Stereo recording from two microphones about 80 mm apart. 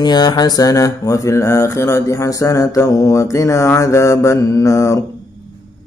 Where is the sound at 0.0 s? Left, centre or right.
Left.